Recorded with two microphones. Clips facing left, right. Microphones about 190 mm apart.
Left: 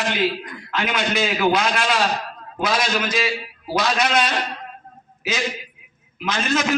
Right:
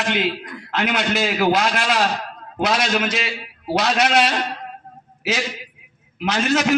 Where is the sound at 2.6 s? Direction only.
75° right (ahead or behind).